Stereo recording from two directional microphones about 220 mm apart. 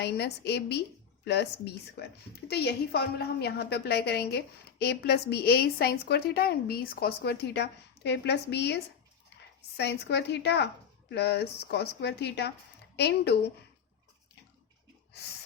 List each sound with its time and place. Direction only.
0.0 s a woman's voice: 50° left (ahead or behind)